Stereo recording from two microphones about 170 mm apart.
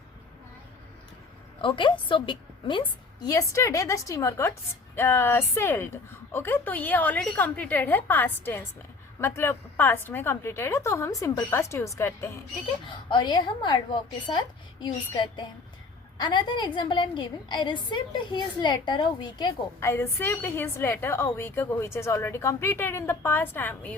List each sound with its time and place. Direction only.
1.6 s a woman's voice: 30° left (ahead or behind)
12.8 s a woman's voice: 30° left (ahead or behind); by 23.9 s 10° left (ahead or behind)